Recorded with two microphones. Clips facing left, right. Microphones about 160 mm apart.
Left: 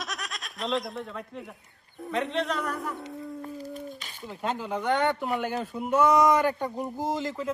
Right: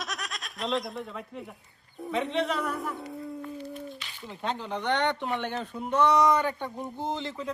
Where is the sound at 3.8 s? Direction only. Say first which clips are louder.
Left 1 dB; 45° left (ahead or behind).